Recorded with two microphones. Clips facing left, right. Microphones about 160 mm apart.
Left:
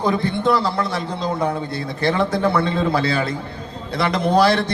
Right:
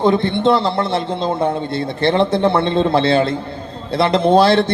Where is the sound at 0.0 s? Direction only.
25° right (ahead or behind).